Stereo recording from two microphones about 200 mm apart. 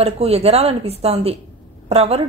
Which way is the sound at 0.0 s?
30° right (ahead or behind).